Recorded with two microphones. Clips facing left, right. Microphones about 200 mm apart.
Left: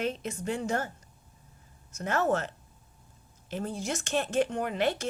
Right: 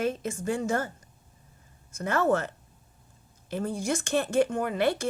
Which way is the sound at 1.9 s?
55° right (ahead or behind).